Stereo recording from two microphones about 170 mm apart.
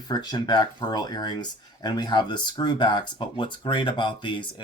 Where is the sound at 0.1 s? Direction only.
25° left (ahead or behind).